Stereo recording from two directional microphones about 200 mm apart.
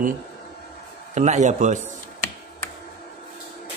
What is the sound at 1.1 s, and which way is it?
Speech, 35° right (ahead or behind).